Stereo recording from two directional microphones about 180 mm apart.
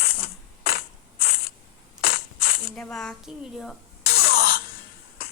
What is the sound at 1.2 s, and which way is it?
Camera, 60° left (ahead or behind).